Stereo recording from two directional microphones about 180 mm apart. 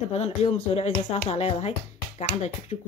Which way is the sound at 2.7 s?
35° left (ahead or behind).